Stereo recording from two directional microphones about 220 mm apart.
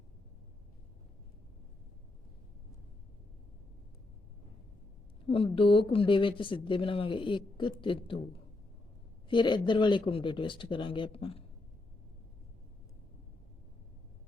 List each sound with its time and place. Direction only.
5.2 s speech: 25° left (ahead or behind)